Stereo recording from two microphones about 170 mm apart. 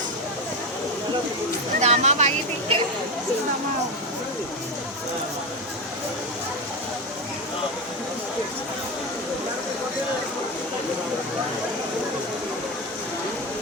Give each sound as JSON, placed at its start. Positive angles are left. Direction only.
{"t": 1.8, "sound": "speech", "side_deg": -40}